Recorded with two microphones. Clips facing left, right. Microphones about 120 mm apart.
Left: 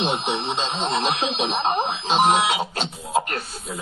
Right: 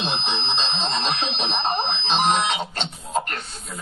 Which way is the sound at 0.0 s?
10° left (ahead or behind).